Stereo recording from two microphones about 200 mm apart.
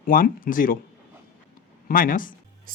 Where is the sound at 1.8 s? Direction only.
45° left (ahead or behind).